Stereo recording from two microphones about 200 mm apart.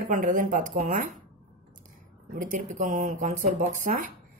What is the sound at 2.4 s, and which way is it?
A woman's voice, 40° right (ahead or behind).